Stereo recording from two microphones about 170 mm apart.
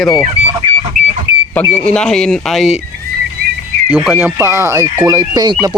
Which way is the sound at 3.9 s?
5° right (ahead or behind).